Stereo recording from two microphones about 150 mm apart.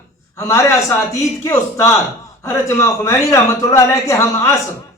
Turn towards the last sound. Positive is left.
turn(degrees=20)  # may be behind; listen again after turning